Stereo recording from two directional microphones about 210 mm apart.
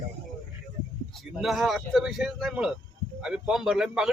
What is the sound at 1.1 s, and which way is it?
A man's voice, centre (ahead or behind).